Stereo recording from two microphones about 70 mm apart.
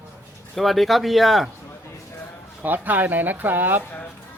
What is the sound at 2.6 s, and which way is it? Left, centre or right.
Speech, right.